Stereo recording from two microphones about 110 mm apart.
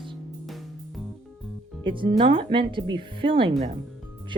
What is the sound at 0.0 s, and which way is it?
Music, centre (ahead or behind).